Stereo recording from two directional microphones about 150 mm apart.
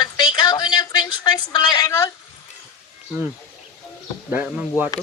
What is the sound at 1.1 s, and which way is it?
Speech, 30° left (ahead or behind).